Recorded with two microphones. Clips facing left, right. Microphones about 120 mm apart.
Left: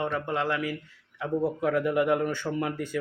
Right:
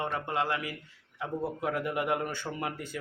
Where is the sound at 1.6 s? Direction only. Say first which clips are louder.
Left 6 dB; 20° right (ahead or behind).